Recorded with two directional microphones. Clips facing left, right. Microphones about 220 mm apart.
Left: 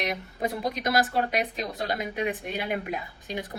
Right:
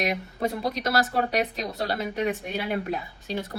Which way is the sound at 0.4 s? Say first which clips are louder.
Right 1 dB; 15° left (ahead or behind).